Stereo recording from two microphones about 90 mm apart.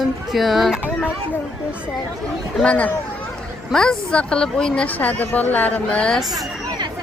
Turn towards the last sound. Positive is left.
turn(degrees=15)  # may be behind; listen again after turning